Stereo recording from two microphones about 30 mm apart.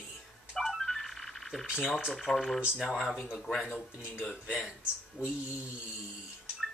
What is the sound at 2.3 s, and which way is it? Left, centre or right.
Speech, centre.